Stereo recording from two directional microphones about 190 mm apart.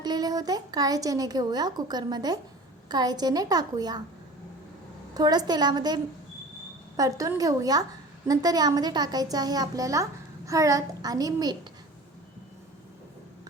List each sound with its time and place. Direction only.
0.0 s a woman's voice: 20° right (ahead or behind)
5.1 s a woman's voice: 20° right (ahead or behind)